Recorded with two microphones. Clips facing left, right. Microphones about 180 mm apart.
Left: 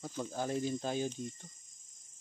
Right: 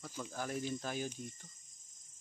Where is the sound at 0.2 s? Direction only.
25° left (ahead or behind).